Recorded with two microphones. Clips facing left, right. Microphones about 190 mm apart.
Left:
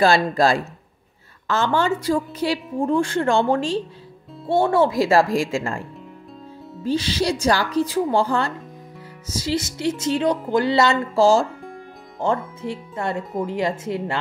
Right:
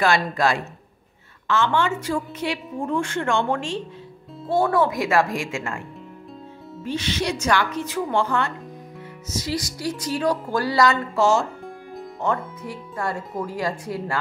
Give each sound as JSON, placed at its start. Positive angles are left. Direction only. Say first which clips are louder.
{"t": 0.0, "sound": "a woman's voice", "louder": "left 4 dB", "side_deg": 35}